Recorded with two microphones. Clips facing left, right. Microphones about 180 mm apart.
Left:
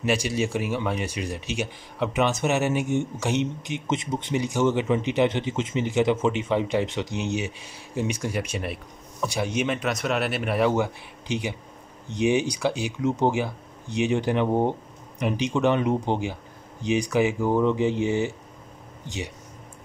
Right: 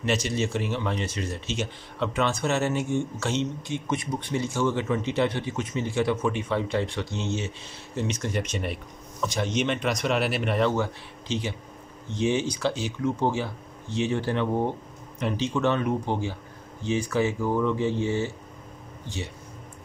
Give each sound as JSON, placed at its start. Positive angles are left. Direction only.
{"t": 0.0, "sound": "speech", "side_deg": 10}